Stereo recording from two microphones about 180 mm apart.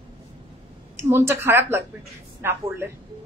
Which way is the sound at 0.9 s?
15° right (ahead or behind).